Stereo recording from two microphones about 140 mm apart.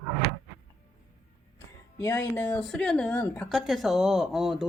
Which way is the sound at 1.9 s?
25° left (ahead or behind).